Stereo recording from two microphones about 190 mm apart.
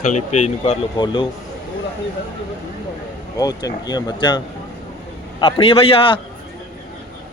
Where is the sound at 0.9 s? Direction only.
25° left (ahead or behind).